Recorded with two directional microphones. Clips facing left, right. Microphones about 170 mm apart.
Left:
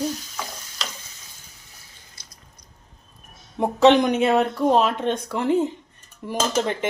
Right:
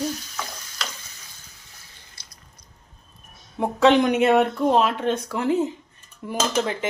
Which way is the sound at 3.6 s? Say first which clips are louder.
Left 2 dB; centre (ahead or behind).